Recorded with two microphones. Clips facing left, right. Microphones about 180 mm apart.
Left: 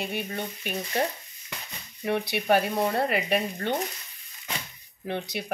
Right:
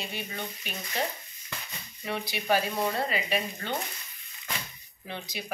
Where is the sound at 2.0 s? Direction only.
60° left (ahead or behind).